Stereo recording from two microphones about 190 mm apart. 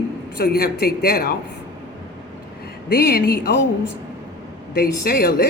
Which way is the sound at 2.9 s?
55° left (ahead or behind).